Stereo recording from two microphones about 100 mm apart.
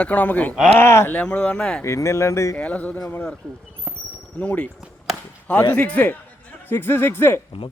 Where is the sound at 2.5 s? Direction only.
15° left (ahead or behind).